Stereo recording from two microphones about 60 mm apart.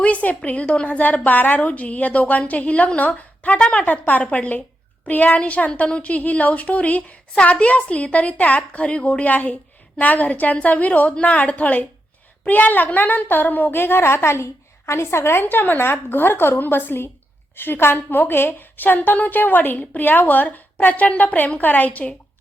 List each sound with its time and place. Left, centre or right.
0.0 s a woman's voice: left
15.4 s a woman's voice: left